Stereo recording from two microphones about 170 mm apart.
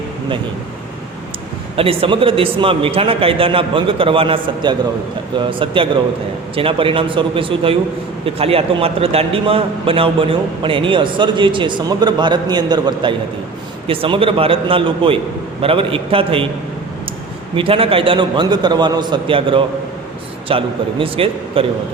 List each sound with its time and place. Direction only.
1.7 s a man's voice: 35° right (ahead or behind)
17.5 s a man's voice: 30° right (ahead or behind)